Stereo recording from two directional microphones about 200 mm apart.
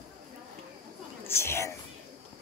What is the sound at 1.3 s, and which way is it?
Speech, 10° left (ahead or behind).